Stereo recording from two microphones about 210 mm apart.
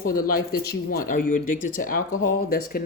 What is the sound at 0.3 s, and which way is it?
Speech, 45° left (ahead or behind).